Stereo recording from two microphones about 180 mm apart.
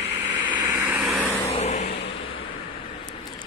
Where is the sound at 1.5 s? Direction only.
40° left (ahead or behind).